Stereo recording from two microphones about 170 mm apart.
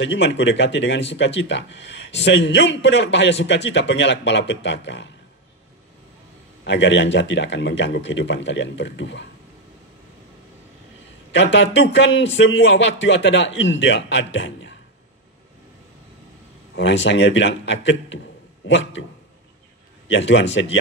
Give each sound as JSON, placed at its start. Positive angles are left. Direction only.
{"t": 0.0, "sound": "speech", "side_deg": 90}
{"t": 6.6, "sound": "speech", "side_deg": 90}
{"t": 11.3, "sound": "speech", "side_deg": 90}
{"t": 16.7, "sound": "speech", "side_deg": 90}
{"t": 20.1, "sound": "speech", "side_deg": 90}